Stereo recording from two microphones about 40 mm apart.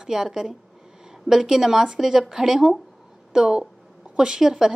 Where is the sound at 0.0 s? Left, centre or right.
Centre.